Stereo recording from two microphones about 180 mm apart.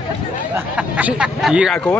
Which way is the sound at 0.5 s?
10° right (ahead or behind).